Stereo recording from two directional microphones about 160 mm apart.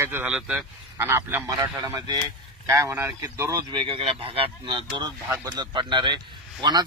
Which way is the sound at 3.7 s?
30° right (ahead or behind).